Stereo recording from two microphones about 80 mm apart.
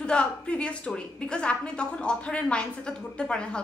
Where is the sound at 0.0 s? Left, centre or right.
Centre.